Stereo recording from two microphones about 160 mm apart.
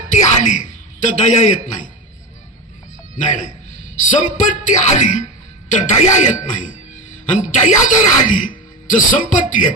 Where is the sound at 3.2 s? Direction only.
50° left (ahead or behind).